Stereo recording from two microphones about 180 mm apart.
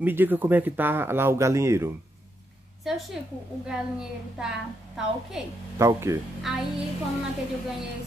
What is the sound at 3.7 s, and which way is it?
Speech, 5° right (ahead or behind).